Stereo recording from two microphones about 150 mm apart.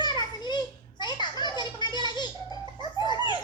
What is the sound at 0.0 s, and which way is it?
Children playing, 30° left (ahead or behind).